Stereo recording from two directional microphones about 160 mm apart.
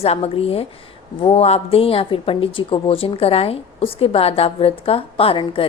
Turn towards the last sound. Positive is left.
turn(degrees=35)  # may be behind; listen again after turning